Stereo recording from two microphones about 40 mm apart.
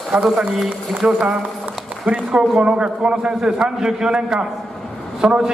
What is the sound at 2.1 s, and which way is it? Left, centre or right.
Speech, right.